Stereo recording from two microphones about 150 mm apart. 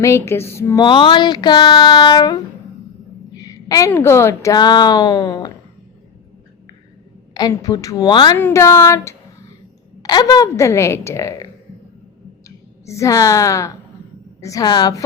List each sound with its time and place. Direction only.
0.0 s a sound: 20° left (ahead or behind)
0.8 s a woman's voice: 30° left (ahead or behind)
7.3 s a woman's voice: 25° left (ahead or behind)
8.4 s a sound: 15° left (ahead or behind)
10.0 s a woman's voice: 25° left (ahead or behind)
12.5 s a woman's voice: 20° left (ahead or behind)